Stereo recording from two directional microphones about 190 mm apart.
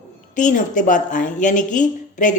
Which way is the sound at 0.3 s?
40° left (ahead or behind).